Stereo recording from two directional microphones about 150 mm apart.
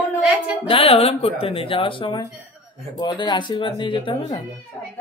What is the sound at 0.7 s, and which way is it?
Speech, 40° left (ahead or behind).